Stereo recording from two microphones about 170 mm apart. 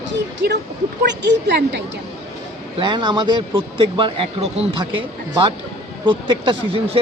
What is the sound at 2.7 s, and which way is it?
Speech, 25° right (ahead or behind).